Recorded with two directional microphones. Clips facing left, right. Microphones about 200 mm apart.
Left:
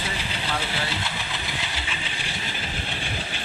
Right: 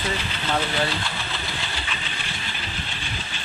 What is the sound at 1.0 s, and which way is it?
Engine, 15° left (ahead or behind).